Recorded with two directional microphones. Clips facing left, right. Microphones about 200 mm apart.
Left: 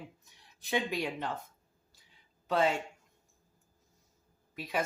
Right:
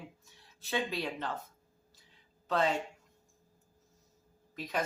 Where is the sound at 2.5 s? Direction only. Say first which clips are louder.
Left 2 dB; 10° left (ahead or behind).